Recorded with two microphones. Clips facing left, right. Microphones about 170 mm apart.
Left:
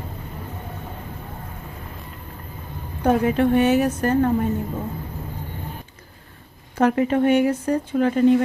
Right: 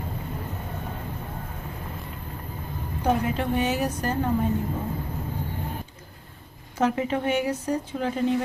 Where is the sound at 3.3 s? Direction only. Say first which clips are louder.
Left 8 dB; 55° left (ahead or behind).